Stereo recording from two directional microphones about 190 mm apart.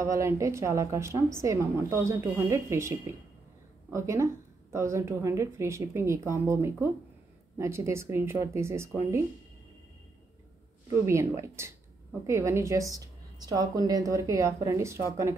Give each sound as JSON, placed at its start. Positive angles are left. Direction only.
{"t": 0.0, "sound": "a woman's voice", "side_deg": -15}
{"t": 3.9, "sound": "a woman's voice", "side_deg": -15}
{"t": 11.1, "sound": "a woman's voice", "side_deg": -15}